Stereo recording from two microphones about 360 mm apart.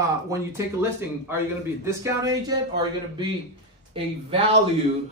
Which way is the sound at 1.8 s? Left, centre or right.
Centre.